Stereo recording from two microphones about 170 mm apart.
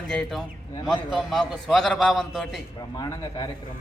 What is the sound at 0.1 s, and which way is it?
A man's voice, 5° left (ahead or behind).